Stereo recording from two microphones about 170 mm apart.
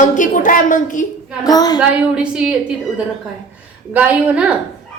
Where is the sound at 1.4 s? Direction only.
20° left (ahead or behind).